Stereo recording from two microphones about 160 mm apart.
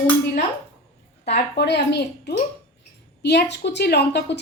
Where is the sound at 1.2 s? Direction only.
90° left.